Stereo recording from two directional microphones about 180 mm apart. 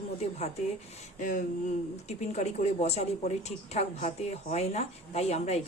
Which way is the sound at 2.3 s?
35° left (ahead or behind).